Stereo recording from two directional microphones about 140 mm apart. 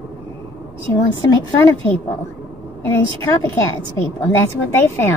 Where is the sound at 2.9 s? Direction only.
20° left (ahead or behind).